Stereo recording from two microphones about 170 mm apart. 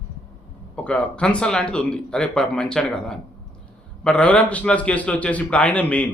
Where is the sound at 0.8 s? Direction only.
5° left (ahead or behind).